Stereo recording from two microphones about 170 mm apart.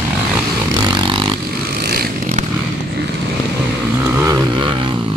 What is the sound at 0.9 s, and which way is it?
Vehicle, 25° right (ahead or behind).